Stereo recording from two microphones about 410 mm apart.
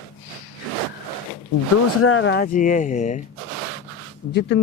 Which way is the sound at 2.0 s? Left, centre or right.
Left.